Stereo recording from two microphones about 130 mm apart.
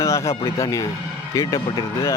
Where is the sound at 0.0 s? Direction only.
20° left (ahead or behind).